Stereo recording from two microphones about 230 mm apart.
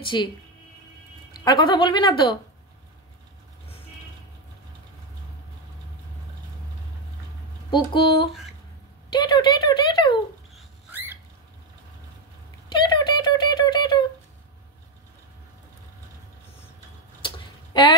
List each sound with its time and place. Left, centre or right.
0.1 s a woman's voice: centre
1.3 s a woman's voice: centre
7.7 s a woman's voice: left
10.5 s dog: centre
12.6 s a sound: centre
17.7 s speech: centre